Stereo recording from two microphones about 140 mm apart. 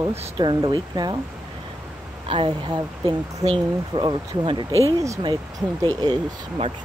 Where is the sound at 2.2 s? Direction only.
40° right (ahead or behind).